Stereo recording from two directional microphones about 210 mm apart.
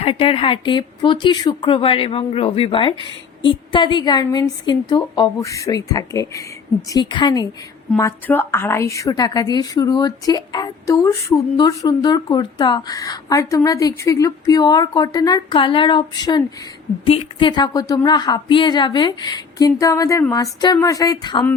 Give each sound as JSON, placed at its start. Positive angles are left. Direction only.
{"t": 0.0, "sound": "a woman's voice", "side_deg": 25}